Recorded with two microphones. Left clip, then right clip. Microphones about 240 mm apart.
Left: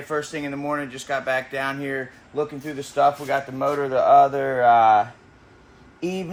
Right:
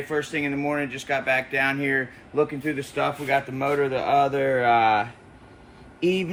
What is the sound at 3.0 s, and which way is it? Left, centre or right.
Speech, centre.